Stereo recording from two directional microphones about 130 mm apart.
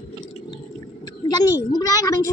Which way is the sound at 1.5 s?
25° left (ahead or behind).